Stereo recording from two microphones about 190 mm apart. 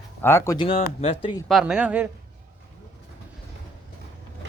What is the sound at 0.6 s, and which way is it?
Speech, 30° left (ahead or behind).